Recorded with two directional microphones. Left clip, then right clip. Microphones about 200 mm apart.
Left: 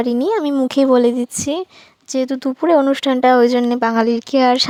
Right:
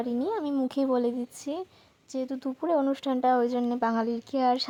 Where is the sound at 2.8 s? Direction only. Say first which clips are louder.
Left 12 dB; 25° left (ahead or behind).